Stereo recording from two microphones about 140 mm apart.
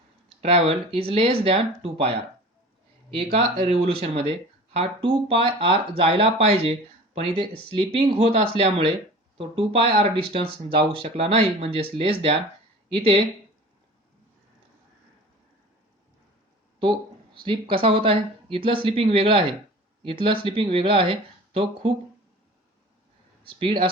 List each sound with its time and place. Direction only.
0.3 s speech: 45° right (ahead or behind)
3.3 s speech: 45° right (ahead or behind)
17.3 s speech: 40° right (ahead or behind)
23.4 s speech: 40° right (ahead or behind)